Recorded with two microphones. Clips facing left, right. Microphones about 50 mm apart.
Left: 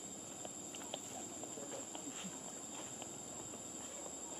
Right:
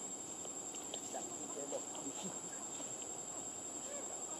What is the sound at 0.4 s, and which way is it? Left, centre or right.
Insect, left.